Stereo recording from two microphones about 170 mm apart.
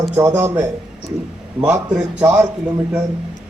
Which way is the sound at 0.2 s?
15° right (ahead or behind).